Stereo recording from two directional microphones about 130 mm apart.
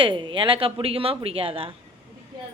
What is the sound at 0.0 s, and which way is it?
Speech, 40° right (ahead or behind).